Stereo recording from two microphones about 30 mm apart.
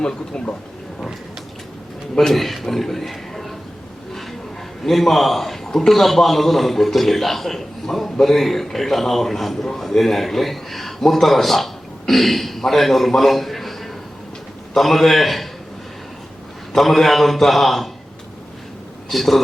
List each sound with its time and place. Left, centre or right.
0.0 s speech: left
2.3 s a man's voice: centre
4.1 s a sound: centre
4.8 s a man's voice: centre
16.7 s a man's voice: centre
19.0 s speech: centre